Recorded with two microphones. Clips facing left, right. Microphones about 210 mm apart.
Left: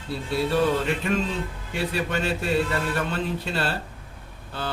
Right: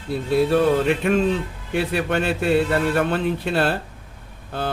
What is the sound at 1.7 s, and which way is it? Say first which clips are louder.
Speech: right 5 dB; 60° right (ahead or behind).